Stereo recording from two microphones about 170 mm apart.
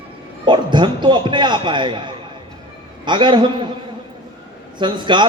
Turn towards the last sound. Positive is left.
turn(degrees=-25)  # may be behind; listen again after turning